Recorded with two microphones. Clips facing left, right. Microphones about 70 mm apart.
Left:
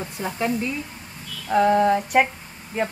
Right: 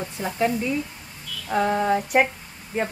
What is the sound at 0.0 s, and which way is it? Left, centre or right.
A woman's voice, centre.